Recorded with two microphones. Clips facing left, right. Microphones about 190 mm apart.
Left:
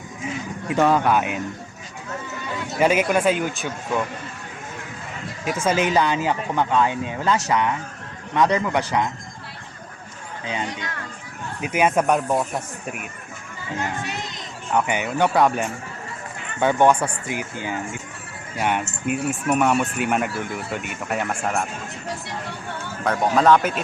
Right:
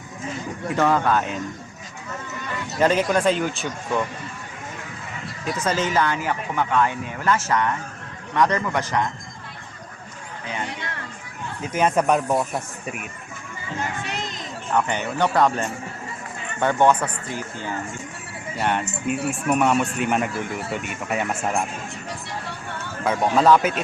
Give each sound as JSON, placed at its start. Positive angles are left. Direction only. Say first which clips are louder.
{"t": 0.8, "sound": "speech", "louder": "left 2 dB", "side_deg": 15}
{"t": 2.7, "sound": "speech", "louder": "even", "side_deg": 10}
{"t": 5.5, "sound": "speech", "louder": "left 3 dB", "side_deg": 10}
{"t": 11.6, "sound": "speech", "louder": "left 1 dB", "side_deg": 10}
{"t": 14.7, "sound": "speech", "louder": "left 1 dB", "side_deg": 10}
{"t": 23.2, "sound": "speech", "louder": "even", "side_deg": 0}